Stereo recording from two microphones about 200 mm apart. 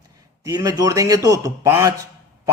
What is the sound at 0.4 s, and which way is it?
Speech, 15° right (ahead or behind).